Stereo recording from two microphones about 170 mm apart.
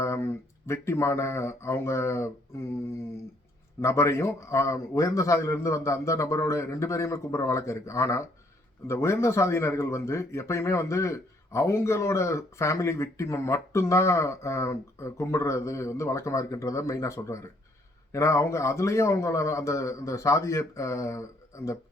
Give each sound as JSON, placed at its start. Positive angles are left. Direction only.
{"t": 0.0, "sound": "a sound", "side_deg": 15}
{"t": 0.7, "sound": "a man's voice", "side_deg": 15}
{"t": 3.8, "sound": "a man's voice", "side_deg": 15}